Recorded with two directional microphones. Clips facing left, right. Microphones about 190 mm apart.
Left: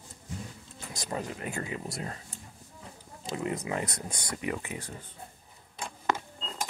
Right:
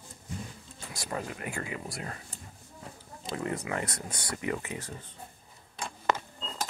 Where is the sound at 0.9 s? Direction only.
20° left (ahead or behind).